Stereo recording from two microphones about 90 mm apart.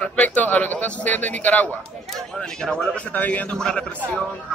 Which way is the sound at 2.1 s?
5° left (ahead or behind).